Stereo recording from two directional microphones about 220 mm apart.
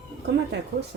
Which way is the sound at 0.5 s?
50° right (ahead or behind).